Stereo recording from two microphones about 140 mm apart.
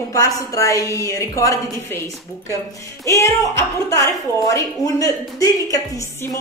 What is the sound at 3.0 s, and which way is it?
Speech, 20° left (ahead or behind).